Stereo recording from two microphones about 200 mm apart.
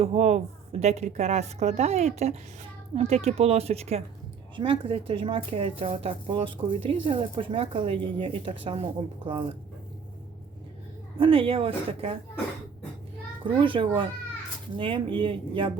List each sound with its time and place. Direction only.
0.0 s a woman's voice: 30° right (ahead or behind)
11.2 s speech: 25° right (ahead or behind)
13.4 s speech: 25° right (ahead or behind)